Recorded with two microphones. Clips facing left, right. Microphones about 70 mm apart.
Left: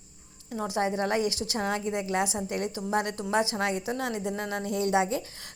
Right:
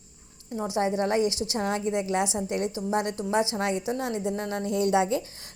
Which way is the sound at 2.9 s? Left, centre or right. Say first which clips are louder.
Right 1 dB; left.